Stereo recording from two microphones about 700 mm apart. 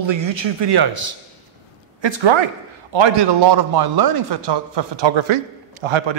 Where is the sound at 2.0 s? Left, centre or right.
Right.